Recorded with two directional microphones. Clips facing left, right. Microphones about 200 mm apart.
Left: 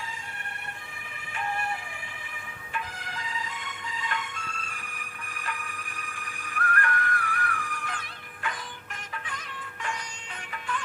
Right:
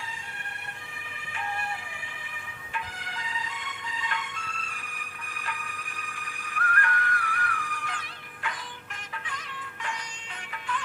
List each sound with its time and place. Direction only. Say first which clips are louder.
2.7 s music: left 1 dB; 45° left (ahead or behind)
10.5 s music: even; 45° left (ahead or behind)